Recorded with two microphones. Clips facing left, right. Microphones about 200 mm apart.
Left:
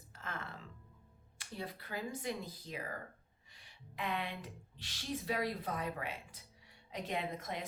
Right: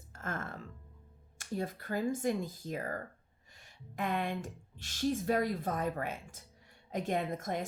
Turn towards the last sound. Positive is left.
turn(degrees=-45)  # may be behind; listen again after turning